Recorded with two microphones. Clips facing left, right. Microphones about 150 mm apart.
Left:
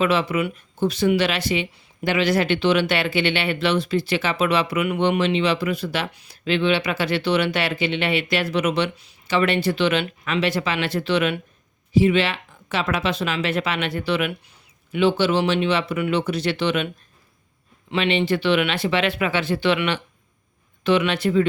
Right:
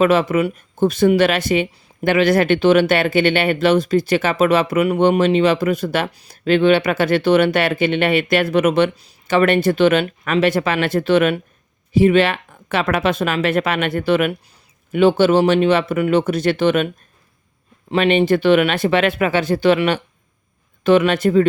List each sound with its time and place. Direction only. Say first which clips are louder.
0.0 s speech: right 6 dB; 45° right (ahead or behind)
17.9 s speech: right 6 dB; 45° right (ahead or behind)